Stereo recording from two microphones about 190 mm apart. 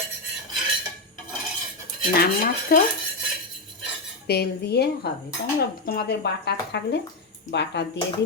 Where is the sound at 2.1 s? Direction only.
50° left (ahead or behind).